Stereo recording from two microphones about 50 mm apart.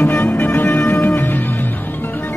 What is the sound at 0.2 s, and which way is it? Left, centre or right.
Music, left.